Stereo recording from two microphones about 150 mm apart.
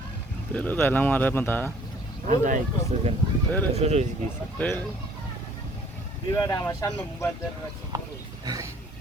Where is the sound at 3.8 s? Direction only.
45° right (ahead or behind).